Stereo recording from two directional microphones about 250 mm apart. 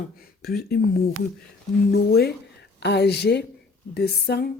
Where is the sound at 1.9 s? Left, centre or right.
Left.